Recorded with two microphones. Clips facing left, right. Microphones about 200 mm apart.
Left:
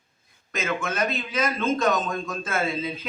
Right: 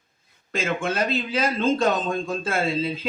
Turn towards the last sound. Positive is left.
turn(degrees=-30)  # may be behind; listen again after turning